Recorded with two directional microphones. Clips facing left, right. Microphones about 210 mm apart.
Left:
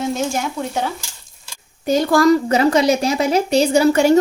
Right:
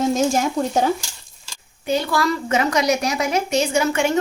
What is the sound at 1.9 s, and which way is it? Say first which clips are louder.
A woman's voice: left 7 dB; 45° left (ahead or behind).